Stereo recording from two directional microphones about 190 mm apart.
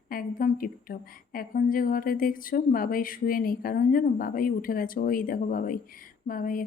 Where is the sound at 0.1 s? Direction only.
50° left (ahead or behind).